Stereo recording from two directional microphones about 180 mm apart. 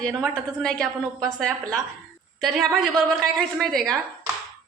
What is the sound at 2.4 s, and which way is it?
A woman's voice, centre (ahead or behind).